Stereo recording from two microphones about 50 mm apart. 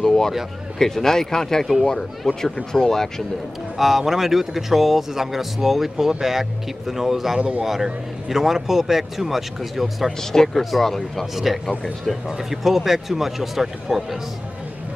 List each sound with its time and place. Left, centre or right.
0.0 s speech: centre
3.7 s speech: centre
7.3 s speech: right
7.6 s speech: centre
11.3 s speech: centre